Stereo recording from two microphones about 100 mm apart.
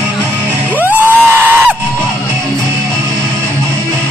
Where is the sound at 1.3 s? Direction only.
20° right (ahead or behind).